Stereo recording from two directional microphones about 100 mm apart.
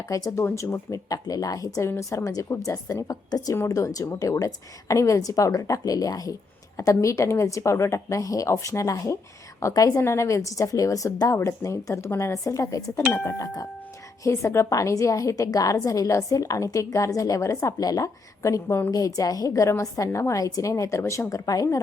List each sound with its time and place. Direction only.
0.1 s a woman's voice: 35° left (ahead or behind)